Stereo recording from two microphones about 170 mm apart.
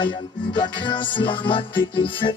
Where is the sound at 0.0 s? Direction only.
25° left (ahead or behind).